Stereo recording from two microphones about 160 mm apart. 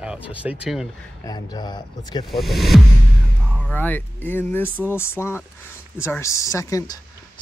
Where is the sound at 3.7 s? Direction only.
10° left (ahead or behind).